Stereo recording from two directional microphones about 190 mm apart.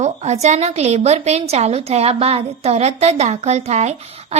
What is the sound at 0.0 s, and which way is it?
A woman's voice, 35° right (ahead or behind).